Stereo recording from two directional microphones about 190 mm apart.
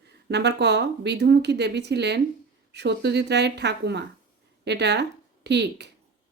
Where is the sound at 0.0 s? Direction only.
60° right (ahead or behind).